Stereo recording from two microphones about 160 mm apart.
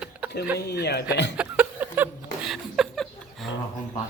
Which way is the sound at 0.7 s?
90° left.